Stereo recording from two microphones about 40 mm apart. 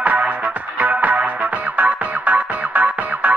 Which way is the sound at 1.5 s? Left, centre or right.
Right.